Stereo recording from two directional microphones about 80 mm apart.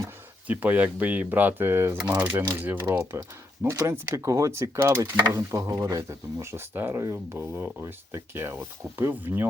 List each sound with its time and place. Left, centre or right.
0.4 s speech: right
3.0 s speech: right
5.3 s speech: right
6.1 s speech: right